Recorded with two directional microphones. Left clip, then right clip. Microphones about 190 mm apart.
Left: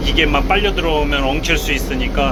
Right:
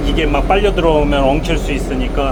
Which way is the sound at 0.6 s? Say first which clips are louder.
Right 4 dB; 20° right (ahead or behind).